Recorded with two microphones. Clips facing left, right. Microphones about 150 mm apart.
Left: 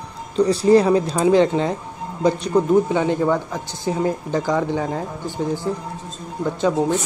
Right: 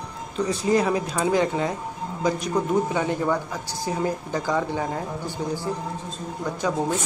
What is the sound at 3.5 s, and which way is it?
Speech, 25° left (ahead or behind).